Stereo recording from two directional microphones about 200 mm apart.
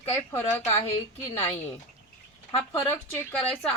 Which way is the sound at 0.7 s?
30° left (ahead or behind).